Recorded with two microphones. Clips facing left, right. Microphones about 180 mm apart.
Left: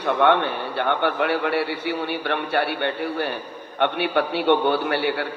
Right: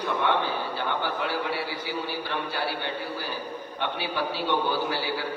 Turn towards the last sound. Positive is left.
turn(degrees=65)  # may be behind; listen again after turning